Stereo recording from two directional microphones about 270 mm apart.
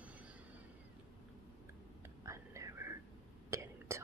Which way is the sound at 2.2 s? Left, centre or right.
Centre.